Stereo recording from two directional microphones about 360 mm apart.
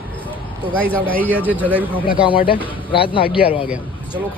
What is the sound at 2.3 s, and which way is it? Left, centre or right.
Speech, centre.